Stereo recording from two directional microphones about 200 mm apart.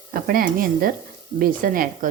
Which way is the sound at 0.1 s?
45° right (ahead or behind).